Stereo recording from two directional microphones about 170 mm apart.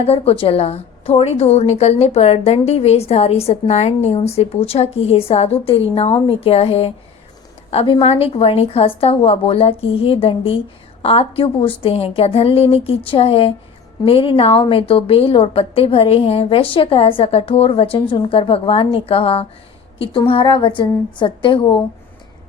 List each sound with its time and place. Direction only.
0.0 s a woman's voice: 35° left (ahead or behind)